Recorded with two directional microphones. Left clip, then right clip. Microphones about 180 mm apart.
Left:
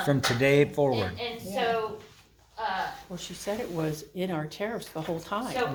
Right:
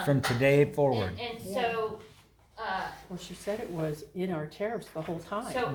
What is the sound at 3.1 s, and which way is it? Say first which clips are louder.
Speech: left 1 dB; 40° left (ahead or behind).